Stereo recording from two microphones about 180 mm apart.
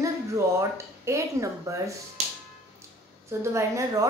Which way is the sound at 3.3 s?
15° right (ahead or behind).